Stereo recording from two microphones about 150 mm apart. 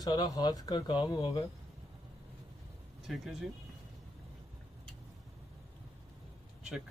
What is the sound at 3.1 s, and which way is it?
Speech, centre (ahead or behind).